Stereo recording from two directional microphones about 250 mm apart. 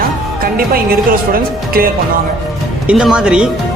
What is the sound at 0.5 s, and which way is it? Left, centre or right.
Speech, right.